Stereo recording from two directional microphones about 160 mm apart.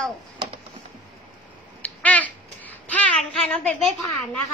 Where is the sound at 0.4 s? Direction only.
30° right (ahead or behind).